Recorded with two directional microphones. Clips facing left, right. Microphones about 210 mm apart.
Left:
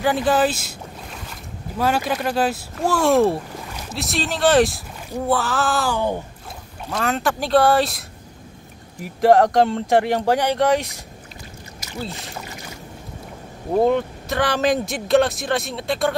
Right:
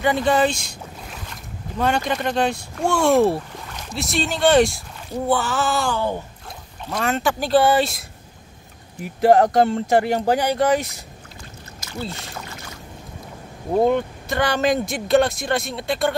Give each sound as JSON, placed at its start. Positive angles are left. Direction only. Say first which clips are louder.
{"t": 0.0, "sound": "speech", "louder": "even", "side_deg": 0}
{"t": 5.9, "sound": "speech", "louder": "left 1 dB", "side_deg": 15}
{"t": 6.9, "sound": "speech", "louder": "even", "side_deg": 0}
{"t": 9.0, "sound": "speech", "louder": "even", "side_deg": 0}
{"t": 12.0, "sound": "speech", "louder": "even", "side_deg": 0}
{"t": 13.7, "sound": "speech", "louder": "even", "side_deg": 0}